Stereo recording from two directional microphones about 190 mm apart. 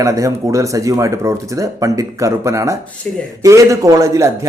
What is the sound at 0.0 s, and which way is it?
Speech, 15° right (ahead or behind).